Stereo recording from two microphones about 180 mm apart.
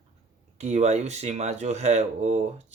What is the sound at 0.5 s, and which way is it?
Speech, 40° right (ahead or behind).